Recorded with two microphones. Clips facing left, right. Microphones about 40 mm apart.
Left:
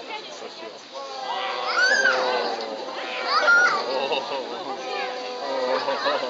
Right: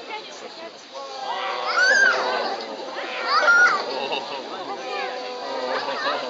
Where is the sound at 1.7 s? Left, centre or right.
Left.